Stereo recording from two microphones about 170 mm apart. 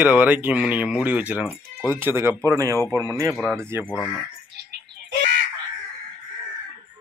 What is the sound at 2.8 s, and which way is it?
Speech, 15° left (ahead or behind).